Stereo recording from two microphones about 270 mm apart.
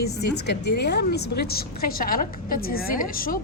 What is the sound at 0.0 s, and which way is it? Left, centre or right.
A woman's voice, left.